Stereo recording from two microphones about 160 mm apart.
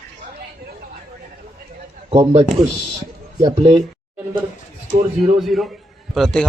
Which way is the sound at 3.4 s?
25° right (ahead or behind).